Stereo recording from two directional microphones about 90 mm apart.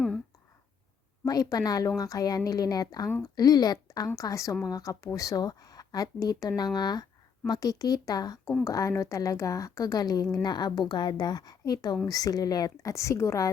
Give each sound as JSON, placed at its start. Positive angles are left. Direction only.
{"t": 1.2, "sound": "a woman's voice", "side_deg": 40}
{"t": 3.8, "sound": "a sound", "side_deg": 45}
{"t": 4.2, "sound": "a woman's voice", "side_deg": 40}